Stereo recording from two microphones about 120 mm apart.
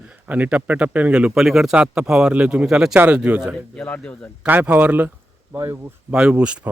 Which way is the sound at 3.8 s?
10° left (ahead or behind).